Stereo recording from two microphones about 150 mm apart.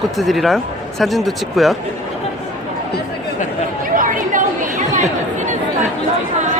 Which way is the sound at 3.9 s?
65° right (ahead or behind).